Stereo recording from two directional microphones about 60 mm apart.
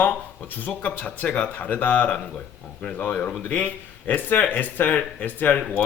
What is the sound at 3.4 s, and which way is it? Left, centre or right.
Speech, left.